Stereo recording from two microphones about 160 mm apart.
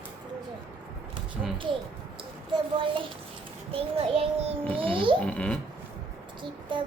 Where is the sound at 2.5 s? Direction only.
30° right (ahead or behind).